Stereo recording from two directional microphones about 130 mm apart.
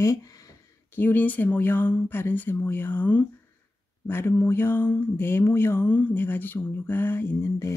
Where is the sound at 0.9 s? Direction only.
15° left (ahead or behind).